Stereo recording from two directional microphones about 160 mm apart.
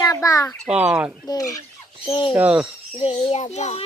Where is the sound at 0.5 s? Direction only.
Centre (ahead or behind).